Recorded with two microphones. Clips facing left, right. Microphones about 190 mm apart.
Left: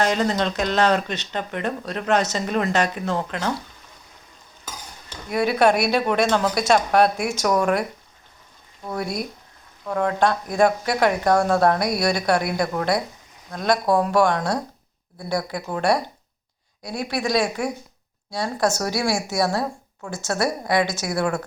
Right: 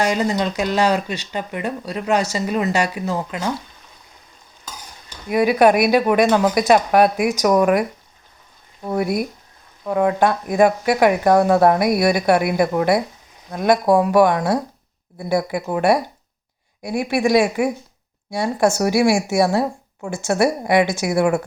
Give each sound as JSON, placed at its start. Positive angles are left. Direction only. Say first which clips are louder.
{"t": 0.0, "sound": "speech", "louder": "right 2 dB", "side_deg": -10}
{"t": 5.4, "sound": "speech", "louder": "right 4 dB", "side_deg": -15}
{"t": 9.8, "sound": "speech", "louder": "right 4 dB", "side_deg": -10}